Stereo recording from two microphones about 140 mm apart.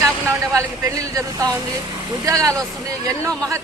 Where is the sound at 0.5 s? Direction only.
20° right (ahead or behind).